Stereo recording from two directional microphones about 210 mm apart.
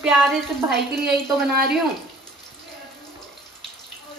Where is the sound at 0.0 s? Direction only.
Centre (ahead or behind).